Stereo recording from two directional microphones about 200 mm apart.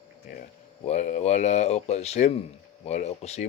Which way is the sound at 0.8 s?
35° left (ahead or behind).